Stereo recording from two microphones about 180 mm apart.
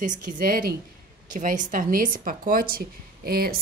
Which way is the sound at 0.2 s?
50° right (ahead or behind).